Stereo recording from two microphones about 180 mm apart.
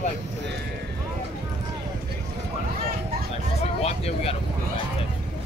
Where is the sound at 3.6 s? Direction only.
35° left (ahead or behind).